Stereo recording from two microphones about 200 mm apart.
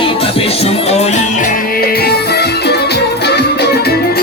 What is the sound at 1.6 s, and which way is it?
Music, 50° left (ahead or behind).